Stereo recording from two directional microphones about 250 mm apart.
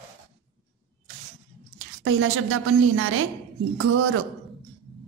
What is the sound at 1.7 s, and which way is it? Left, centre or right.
A woman's voice, right.